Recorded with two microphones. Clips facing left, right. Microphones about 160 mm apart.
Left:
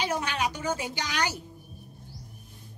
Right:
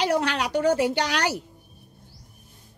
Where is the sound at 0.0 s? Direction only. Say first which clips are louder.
Right 5 dB; 70° right (ahead or behind).